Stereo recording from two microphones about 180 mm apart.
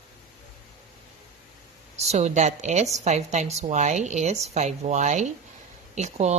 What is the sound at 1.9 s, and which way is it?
Speech, 40° right (ahead or behind).